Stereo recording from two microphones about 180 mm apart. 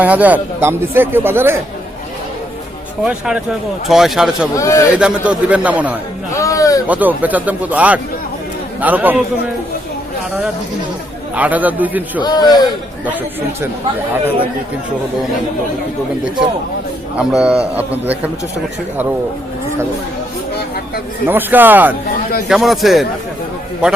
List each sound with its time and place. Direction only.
0.0 s speech: 10° right (ahead or behind)
3.0 s speech: 5° right (ahead or behind)
4.5 s a man's voice: 15° left (ahead or behind)
4.9 s speech: 5° right (ahead or behind)
6.3 s a sound: 15° left (ahead or behind)
6.8 s speech: 10° right (ahead or behind)
11.3 s speech: 10° right (ahead or behind)
12.2 s a man's voice: 25° left (ahead or behind)
17.2 s speech: 5° right (ahead or behind)
21.2 s speech: 10° right (ahead or behind)